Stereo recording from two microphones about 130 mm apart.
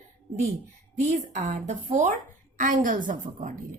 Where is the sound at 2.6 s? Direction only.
80° right.